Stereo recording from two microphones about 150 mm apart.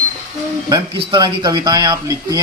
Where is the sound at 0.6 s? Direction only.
30° right (ahead or behind).